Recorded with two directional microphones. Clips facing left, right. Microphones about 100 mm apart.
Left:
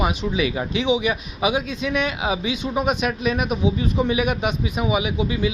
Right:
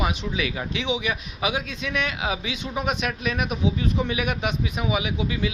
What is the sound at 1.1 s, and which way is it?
Speech, 10° left (ahead or behind).